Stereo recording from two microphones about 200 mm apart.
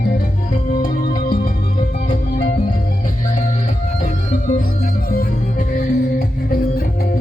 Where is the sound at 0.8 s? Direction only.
45° left (ahead or behind).